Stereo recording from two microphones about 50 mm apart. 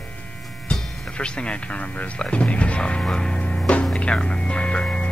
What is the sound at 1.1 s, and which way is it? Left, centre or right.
Speech, centre.